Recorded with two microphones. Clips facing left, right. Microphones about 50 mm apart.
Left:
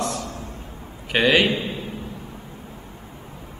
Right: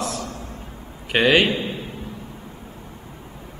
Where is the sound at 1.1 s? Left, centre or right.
Centre.